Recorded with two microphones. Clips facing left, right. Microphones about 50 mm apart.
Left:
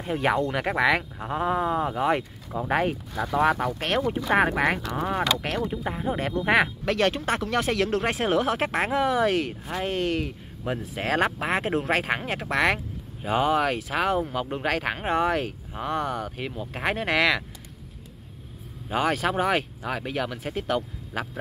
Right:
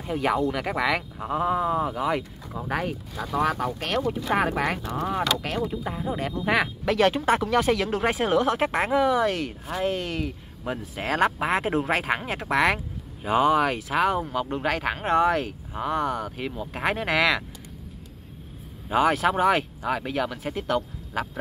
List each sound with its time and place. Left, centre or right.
0.0 s speech: left
6.4 s speech: centre
6.8 s speech: centre
18.9 s speech: centre